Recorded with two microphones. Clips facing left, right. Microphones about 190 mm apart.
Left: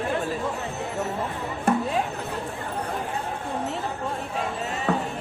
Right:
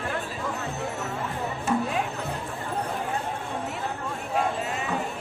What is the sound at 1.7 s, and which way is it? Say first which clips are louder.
Music: left 3 dB; 60° left (ahead or behind).